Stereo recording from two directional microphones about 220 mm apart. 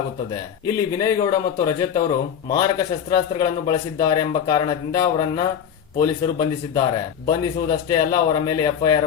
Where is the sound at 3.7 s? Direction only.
15° left (ahead or behind).